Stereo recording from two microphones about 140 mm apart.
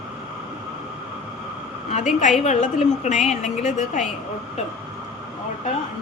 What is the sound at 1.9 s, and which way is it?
A woman's voice, 60° left (ahead or behind).